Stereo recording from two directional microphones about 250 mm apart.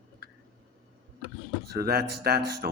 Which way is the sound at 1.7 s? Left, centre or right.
Right.